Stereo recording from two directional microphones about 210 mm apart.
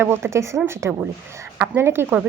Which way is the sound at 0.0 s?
10° right (ahead or behind).